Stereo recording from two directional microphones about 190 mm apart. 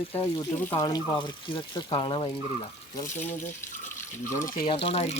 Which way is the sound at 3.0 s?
10° left (ahead or behind).